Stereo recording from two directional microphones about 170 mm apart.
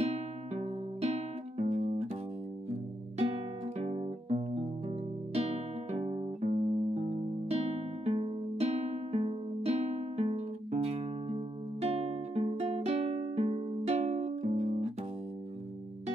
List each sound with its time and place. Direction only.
0.0 s music: 40° right (ahead or behind)
3.7 s music: 35° right (ahead or behind)